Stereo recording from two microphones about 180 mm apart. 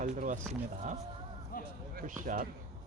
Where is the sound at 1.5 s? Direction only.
55° left (ahead or behind).